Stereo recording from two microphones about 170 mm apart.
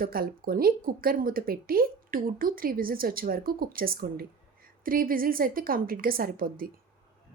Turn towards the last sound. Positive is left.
turn(degrees=-60)  # may be behind; listen again after turning